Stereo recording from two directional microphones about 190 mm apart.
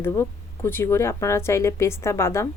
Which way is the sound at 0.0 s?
15° left (ahead or behind).